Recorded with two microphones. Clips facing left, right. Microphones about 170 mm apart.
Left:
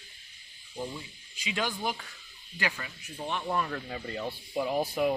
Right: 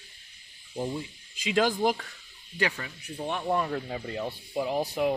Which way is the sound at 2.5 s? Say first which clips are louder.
Right 4 dB; 35° right (ahead or behind).